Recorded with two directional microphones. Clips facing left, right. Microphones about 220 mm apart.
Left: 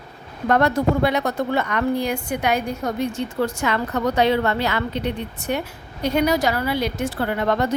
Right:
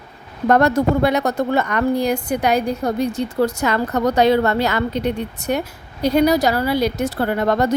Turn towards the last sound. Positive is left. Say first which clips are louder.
# right 3 dB
turn(degrees=-40)  # may be behind; listen again after turning